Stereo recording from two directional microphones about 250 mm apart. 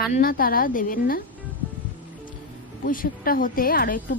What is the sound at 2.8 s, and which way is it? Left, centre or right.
A woman's voice, left.